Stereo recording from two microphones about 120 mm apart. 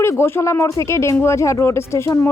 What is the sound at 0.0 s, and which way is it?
Speech, 20° left (ahead or behind).